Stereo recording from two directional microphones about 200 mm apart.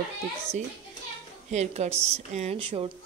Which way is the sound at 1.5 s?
35° right (ahead or behind).